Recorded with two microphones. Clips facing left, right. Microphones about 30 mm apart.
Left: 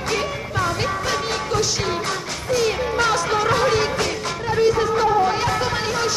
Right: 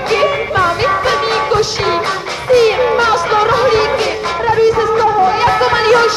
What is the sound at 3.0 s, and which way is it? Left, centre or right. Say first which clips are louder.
Music: right 7 dB; right.